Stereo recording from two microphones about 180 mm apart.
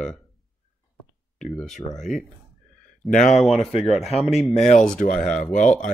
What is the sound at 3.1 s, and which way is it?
Speech, 45° left (ahead or behind).